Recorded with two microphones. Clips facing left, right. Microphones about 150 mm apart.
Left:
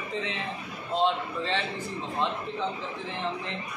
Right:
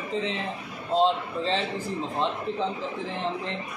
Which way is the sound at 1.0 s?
35° right (ahead or behind).